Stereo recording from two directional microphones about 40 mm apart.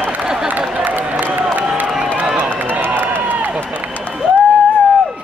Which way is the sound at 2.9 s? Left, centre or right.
Right.